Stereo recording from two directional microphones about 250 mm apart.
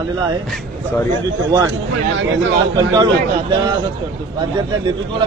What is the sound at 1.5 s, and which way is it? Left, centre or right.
Speech, centre.